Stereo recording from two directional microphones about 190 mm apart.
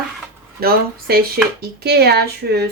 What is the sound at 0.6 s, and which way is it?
Speech, 50° right (ahead or behind).